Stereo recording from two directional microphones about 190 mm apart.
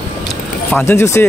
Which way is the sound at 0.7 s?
10° left (ahead or behind).